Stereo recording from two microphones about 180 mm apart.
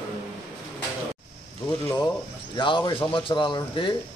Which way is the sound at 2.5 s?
25° left (ahead or behind).